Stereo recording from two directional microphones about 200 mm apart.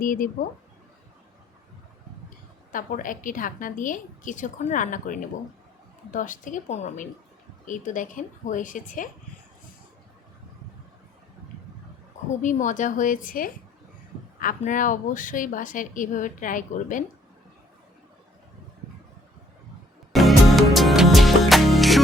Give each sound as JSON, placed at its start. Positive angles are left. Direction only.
{"t": 0.0, "sound": "speech", "side_deg": 45}
{"t": 2.7, "sound": "a woman's voice", "side_deg": 40}
{"t": 12.4, "sound": "a woman's voice", "side_deg": 40}
{"t": 20.1, "sound": "music", "side_deg": 0}